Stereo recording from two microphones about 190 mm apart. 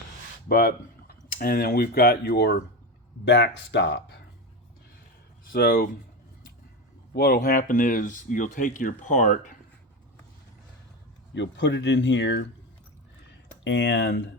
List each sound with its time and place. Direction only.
0.4 s speech: 50° left (ahead or behind)
5.5 s speech: 55° left (ahead or behind)
7.1 s speech: 55° left (ahead or behind)
11.3 s speech: 65° left (ahead or behind)
13.7 s speech: 65° left (ahead or behind)